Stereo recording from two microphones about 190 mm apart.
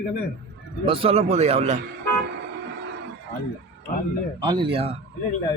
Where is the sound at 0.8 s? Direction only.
30° right (ahead or behind).